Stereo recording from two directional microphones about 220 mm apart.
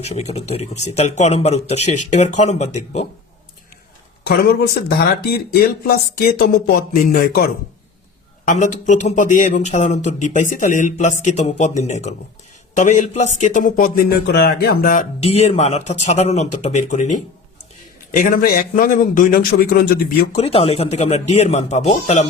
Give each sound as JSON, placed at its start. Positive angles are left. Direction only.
{"t": 0.0, "sound": "speech", "side_deg": 30}
{"t": 4.3, "sound": "speech", "side_deg": 45}
{"t": 15.2, "sound": "speech", "side_deg": 30}
{"t": 18.2, "sound": "speech", "side_deg": 40}
{"t": 20.3, "sound": "speech", "side_deg": 25}